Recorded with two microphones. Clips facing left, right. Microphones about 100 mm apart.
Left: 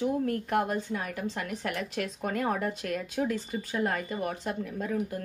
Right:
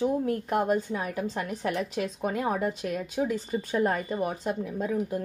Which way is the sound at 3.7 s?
30° right (ahead or behind).